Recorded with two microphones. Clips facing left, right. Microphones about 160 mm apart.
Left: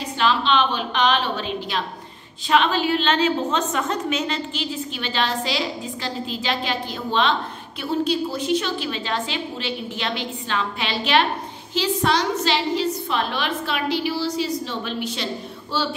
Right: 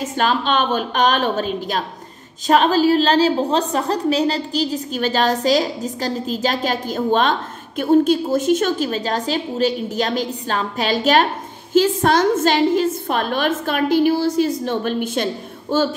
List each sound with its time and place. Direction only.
0.0 s a woman's voice: 45° right (ahead or behind)